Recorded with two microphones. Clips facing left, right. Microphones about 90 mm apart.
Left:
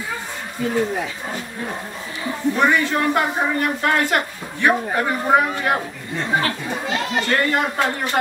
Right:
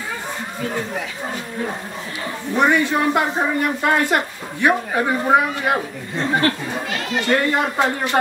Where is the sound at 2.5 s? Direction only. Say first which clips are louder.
Right 3 dB; 15° right (ahead or behind).